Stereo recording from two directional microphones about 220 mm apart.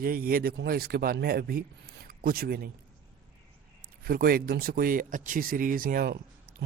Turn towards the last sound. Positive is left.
turn(degrees=-45)  # may be behind; listen again after turning